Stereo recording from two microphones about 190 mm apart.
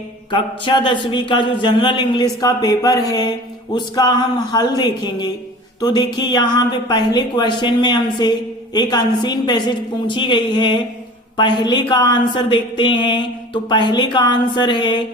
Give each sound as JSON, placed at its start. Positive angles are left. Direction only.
{"t": 0.3, "sound": "speech", "side_deg": 25}